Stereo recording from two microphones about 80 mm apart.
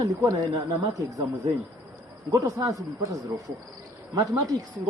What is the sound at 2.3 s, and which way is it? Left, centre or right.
Speech, right.